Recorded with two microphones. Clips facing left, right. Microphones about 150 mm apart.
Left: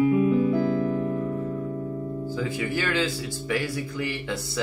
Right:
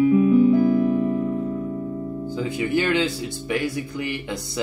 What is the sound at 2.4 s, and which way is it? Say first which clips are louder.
Speech: right 6 dB; 20° right (ahead or behind).